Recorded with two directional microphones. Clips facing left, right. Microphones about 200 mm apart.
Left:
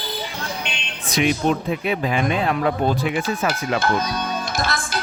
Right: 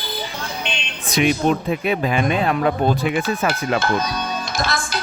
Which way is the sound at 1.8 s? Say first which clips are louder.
Right 2 dB; 55° right (ahead or behind).